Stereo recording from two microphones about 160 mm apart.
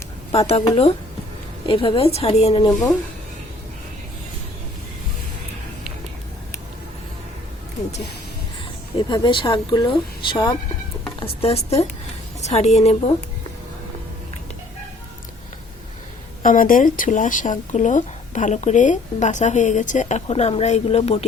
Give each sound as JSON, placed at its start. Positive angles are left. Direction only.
{"t": 0.3, "sound": "a woman's voice", "side_deg": 40}
{"t": 1.6, "sound": "a woman's voice", "side_deg": 35}
{"t": 9.0, "sound": "a woman's voice", "side_deg": 30}
{"t": 16.4, "sound": "speech", "side_deg": 60}